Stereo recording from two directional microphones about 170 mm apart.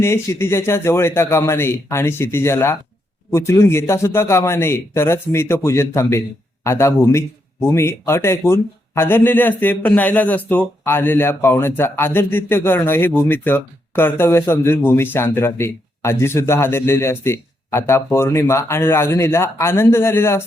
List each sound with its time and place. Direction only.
0.0 s a man's voice: 15° left (ahead or behind)